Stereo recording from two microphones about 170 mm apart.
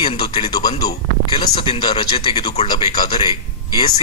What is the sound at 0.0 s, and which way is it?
A man's voice, 35° left (ahead or behind).